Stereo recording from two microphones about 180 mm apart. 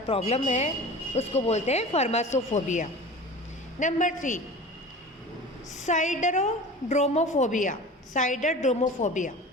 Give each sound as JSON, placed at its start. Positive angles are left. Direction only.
{"t": 0.1, "sound": "a woman's voice", "side_deg": 35}
{"t": 5.8, "sound": "a woman's voice", "side_deg": 40}